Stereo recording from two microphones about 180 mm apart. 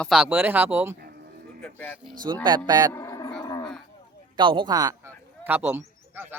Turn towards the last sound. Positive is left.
turn(degrees=-10)  # may be behind; listen again after turning